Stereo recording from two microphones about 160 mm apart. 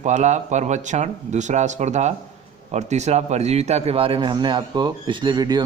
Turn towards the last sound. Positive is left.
turn(degrees=-25)  # may be behind; listen again after turning